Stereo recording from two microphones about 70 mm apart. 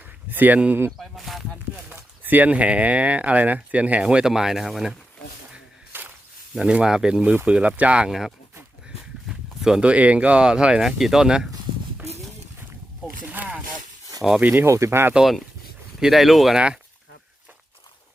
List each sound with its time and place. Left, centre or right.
0.3 s speech: right
0.9 s a sound: centre
2.0 s speech: right; by 4.9 s centre
5.9 s walk: right
6.6 s speech: centre
9.3 s a sound: centre
9.9 s speech: centre
13.2 s wild animals: right
14.4 s speech: right
15.1 s speech: centre